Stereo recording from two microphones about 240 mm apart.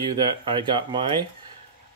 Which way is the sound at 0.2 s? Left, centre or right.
Centre.